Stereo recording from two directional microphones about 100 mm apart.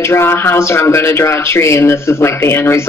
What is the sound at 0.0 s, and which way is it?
Speech, 25° left (ahead or behind).